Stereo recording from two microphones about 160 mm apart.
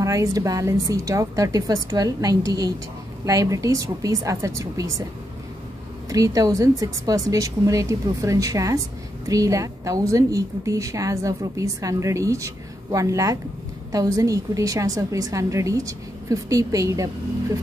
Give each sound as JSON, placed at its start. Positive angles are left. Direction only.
{"t": 0.0, "sound": "a woman's voice", "side_deg": -20}
{"t": 6.0, "sound": "a woman's voice", "side_deg": -20}